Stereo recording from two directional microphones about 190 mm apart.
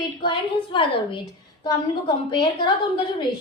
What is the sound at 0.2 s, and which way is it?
A woman's voice, 25° left (ahead or behind).